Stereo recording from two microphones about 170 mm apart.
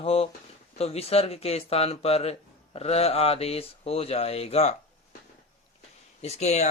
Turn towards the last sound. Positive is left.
turn(degrees=40)  # may be behind; listen again after turning